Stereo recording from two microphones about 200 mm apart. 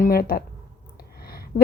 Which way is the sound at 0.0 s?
50° left (ahead or behind).